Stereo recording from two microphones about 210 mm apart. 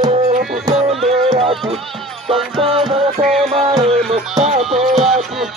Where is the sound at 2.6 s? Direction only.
25° right (ahead or behind).